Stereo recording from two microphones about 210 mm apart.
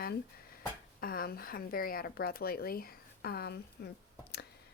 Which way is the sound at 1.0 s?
45° left (ahead or behind).